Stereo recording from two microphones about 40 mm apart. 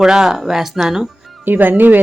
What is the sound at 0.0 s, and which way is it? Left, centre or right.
Speech, centre.